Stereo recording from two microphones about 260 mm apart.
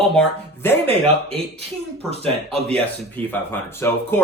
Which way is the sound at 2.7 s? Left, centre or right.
Centre.